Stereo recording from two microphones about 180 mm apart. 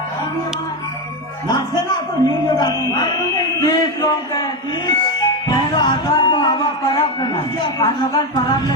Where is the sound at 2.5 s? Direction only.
25° left (ahead or behind).